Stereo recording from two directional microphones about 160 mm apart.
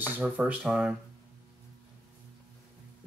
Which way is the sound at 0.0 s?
10° right (ahead or behind).